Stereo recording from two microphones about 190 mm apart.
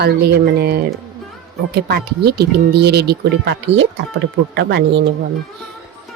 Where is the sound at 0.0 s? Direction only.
55° right (ahead or behind).